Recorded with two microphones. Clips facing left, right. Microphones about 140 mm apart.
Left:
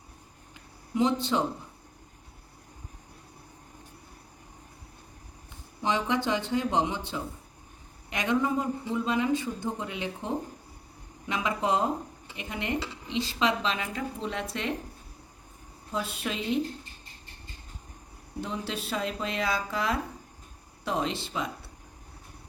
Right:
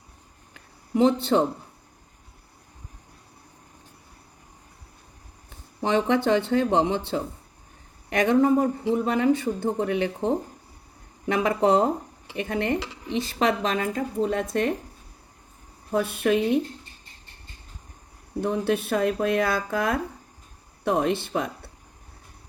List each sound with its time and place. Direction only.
0.5 s a sound: 60° right (ahead or behind)
5.8 s speech: 60° right (ahead or behind)
8.1 s speech: 55° right (ahead or behind)
15.9 s speech: 60° right (ahead or behind)
18.3 s speech: 55° right (ahead or behind)